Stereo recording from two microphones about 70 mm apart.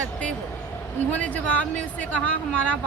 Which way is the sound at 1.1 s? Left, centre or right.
Left.